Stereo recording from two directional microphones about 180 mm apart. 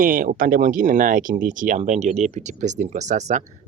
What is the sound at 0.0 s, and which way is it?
Speech, 50° right (ahead or behind).